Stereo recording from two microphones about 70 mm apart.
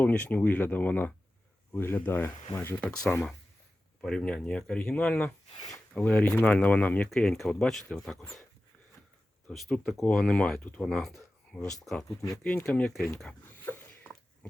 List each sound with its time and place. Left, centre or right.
0.0 s speech: centre; by 2.7 s left
2.8 s speech: centre
7.1 s speech: centre
9.5 s speech: centre
10.1 s speech: centre
10.8 s speech: centre
12.4 s speech: left